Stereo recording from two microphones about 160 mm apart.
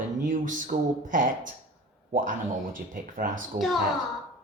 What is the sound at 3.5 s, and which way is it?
Speech, centre (ahead or behind).